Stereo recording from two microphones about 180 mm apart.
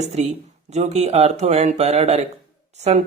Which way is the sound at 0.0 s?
40° right (ahead or behind).